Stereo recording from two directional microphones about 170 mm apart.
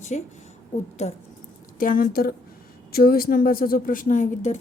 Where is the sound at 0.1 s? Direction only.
45° left (ahead or behind).